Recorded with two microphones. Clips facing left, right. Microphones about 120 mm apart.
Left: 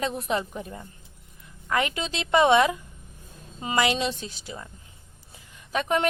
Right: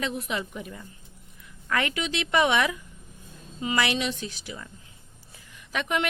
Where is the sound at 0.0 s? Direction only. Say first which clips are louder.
Left 3 dB; 40° left (ahead or behind).